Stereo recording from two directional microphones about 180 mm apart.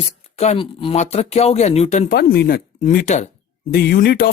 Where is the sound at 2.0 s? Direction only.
60° left (ahead or behind).